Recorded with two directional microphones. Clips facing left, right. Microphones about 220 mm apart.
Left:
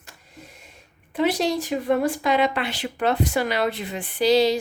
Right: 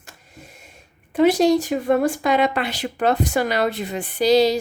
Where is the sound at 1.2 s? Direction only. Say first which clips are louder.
Right 7 dB; 45° right (ahead or behind).